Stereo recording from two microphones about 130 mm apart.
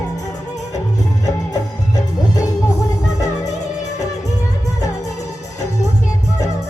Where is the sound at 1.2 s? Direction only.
25° left (ahead or behind).